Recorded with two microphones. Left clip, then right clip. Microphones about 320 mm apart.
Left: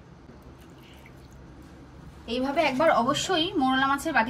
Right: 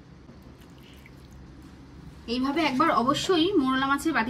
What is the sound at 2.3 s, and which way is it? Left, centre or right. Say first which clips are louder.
A woman's voice: left 1 dB; right.